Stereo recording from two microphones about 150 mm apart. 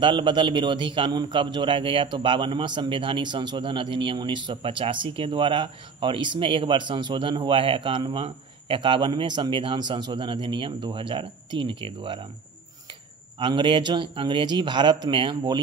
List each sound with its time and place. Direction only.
0.0 s a man's voice: 35° right (ahead or behind)
13.4 s a man's voice: 30° right (ahead or behind)